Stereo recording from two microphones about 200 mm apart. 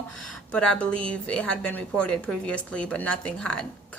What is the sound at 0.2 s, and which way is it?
A woman's voice, 5° left (ahead or behind).